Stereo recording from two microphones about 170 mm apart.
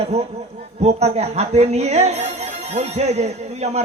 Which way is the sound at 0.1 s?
40° right (ahead or behind).